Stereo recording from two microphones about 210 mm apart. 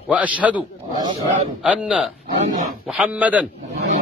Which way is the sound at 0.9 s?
20° right (ahead or behind).